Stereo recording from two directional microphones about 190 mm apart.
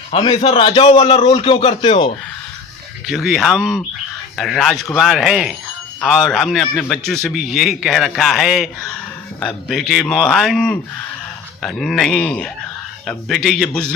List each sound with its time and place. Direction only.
0.1 s a man's voice: 30° left (ahead or behind)
3.1 s a man's voice: centre (ahead or behind)